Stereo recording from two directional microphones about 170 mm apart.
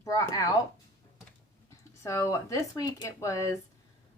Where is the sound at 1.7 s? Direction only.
15° left (ahead or behind).